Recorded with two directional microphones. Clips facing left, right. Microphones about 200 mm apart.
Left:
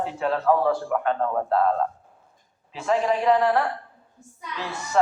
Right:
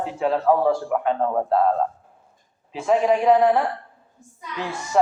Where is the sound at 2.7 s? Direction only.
5° right (ahead or behind).